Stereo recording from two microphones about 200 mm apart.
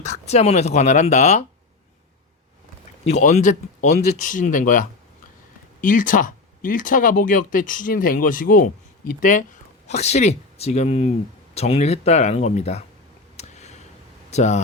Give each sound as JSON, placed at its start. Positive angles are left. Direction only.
{"t": 0.0, "sound": "speech", "side_deg": 35}
{"t": 3.0, "sound": "speech", "side_deg": 35}
{"t": 13.3, "sound": "a sound", "side_deg": 35}
{"t": 14.3, "sound": "speech", "side_deg": 35}